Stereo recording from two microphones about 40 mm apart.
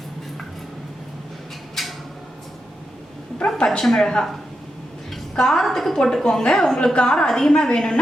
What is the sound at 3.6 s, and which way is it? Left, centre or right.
Speech, centre.